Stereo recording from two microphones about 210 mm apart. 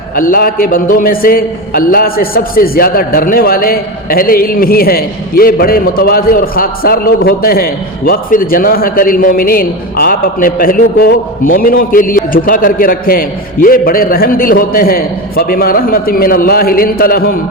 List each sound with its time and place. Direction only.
0.2 s speech: 45° left (ahead or behind)